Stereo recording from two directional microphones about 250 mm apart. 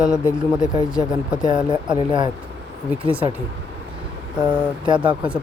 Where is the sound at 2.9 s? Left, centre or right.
Centre.